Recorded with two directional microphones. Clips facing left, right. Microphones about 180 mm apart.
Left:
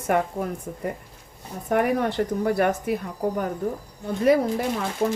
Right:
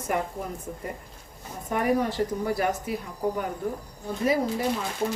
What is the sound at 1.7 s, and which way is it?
Speech, 60° left (ahead or behind).